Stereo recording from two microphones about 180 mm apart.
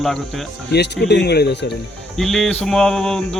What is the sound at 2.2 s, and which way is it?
Speech, centre (ahead or behind).